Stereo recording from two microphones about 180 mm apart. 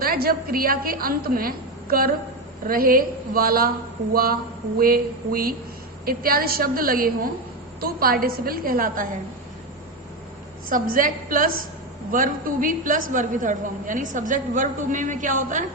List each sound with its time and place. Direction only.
0.0 s a woman's voice: 55° right (ahead or behind)
10.7 s a woman's voice: 50° right (ahead or behind)